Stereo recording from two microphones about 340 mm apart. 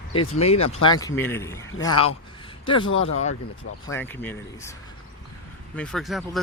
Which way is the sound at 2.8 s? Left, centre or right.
Left.